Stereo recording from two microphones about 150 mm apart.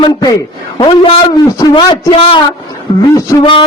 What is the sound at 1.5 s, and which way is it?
A man's voice, 25° left (ahead or behind).